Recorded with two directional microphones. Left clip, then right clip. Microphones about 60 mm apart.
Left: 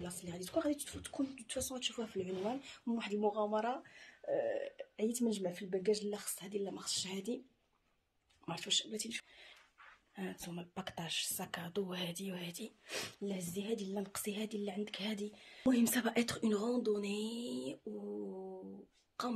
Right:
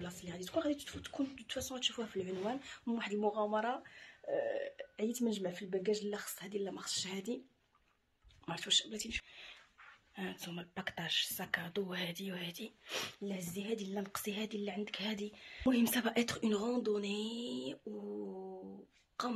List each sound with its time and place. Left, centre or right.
0.0 s speech: left
1.8 s speech: centre
3.5 s speech: left
6.3 s speech: centre
8.5 s speech: left
10.1 s speech: centre
13.2 s a woman's voice: left
13.7 s speech: left; by 15.3 s centre
15.8 s speech: left
16.6 s a woman's voice: left
18.3 s mantra: centre